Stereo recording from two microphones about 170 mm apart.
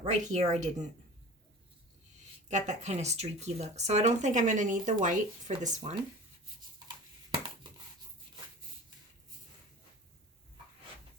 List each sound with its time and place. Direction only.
0.0 s speech: 45° right (ahead or behind)
2.5 s speech: 45° right (ahead or behind)